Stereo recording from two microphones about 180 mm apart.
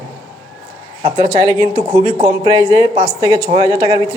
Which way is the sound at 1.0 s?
20° right (ahead or behind).